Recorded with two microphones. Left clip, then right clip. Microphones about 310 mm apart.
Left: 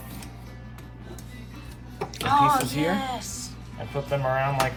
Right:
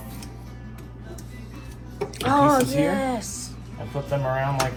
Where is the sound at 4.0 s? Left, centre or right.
Left.